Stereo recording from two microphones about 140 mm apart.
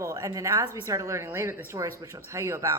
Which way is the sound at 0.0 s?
25° right (ahead or behind).